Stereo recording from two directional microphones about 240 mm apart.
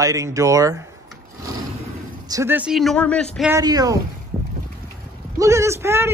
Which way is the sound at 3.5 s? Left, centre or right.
Centre.